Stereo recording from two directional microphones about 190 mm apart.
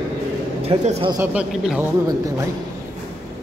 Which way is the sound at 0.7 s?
30° right (ahead or behind).